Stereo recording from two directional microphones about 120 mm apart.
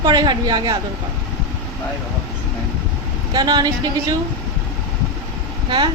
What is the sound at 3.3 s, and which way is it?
Speech, 40° right (ahead or behind).